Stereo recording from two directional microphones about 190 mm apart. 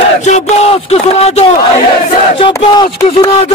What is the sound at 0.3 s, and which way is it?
Speech, 35° left (ahead or behind).